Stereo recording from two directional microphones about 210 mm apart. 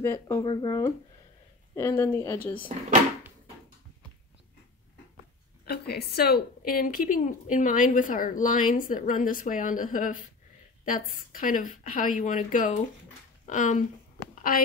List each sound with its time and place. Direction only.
0.0 s speech: 15° left (ahead or behind)
5.7 s a woman's voice: 50° left (ahead or behind)